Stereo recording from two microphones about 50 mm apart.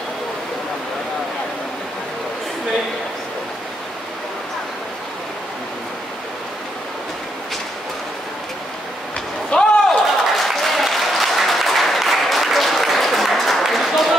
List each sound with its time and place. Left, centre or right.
9.5 s slam: left
9.8 s applause: centre